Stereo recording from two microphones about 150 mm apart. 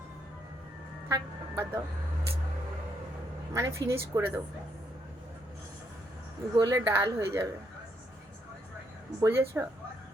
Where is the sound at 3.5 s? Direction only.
20° right (ahead or behind).